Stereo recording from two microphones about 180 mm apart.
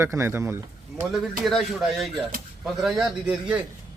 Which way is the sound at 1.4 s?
Centre (ahead or behind).